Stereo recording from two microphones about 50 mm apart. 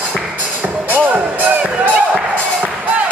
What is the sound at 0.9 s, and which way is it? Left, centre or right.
Music, right.